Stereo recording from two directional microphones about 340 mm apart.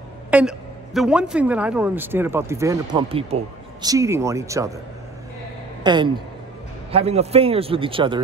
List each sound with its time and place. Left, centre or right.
0.3 s a man's voice: centre
5.9 s a man's voice: centre